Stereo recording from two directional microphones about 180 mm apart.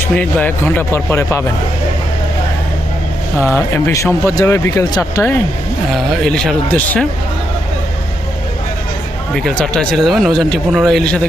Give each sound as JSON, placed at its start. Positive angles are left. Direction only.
{"t": 0.0, "sound": "speech", "side_deg": 10}
{"t": 3.4, "sound": "speech", "side_deg": 15}
{"t": 5.9, "sound": "speech", "side_deg": 5}
{"t": 9.3, "sound": "speech", "side_deg": 5}